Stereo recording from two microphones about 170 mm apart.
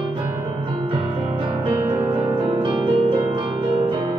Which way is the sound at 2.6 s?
30° right (ahead or behind).